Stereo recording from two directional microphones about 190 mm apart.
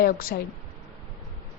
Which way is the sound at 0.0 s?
50° left (ahead or behind).